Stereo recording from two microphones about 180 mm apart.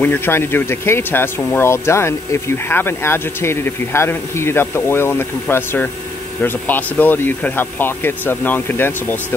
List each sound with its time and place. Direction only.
0.0 s speech: 10° left (ahead or behind)